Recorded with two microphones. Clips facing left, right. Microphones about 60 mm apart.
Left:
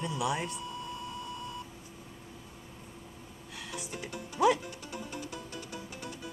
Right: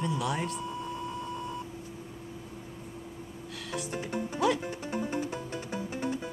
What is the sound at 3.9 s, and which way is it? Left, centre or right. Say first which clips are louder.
Speech: right 7 dB; right.